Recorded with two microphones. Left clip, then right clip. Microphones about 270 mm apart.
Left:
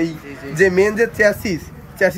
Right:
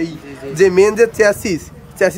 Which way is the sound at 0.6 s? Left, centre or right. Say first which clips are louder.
Right 4 dB; centre.